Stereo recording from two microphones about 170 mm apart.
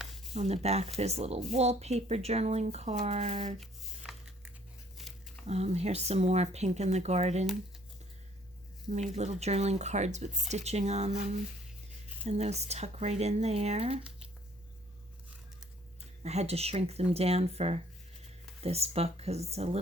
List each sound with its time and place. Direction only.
0.3 s speech: 40° right (ahead or behind)
3.6 s music: 5° right (ahead or behind)
5.5 s speech: 40° right (ahead or behind)
8.9 s speech: 40° right (ahead or behind)
12.2 s speech: 40° right (ahead or behind)
16.2 s speech: 40° right (ahead or behind)